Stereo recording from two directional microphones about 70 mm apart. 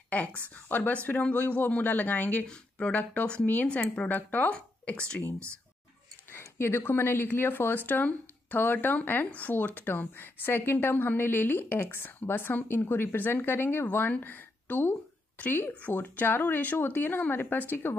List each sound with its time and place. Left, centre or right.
0.1 s speech: left
6.3 s speech: left